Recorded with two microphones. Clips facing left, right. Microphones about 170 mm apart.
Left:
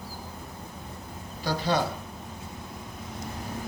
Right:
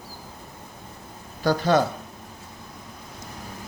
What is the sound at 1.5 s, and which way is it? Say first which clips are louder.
Speech: right 7 dB; 50° right (ahead or behind).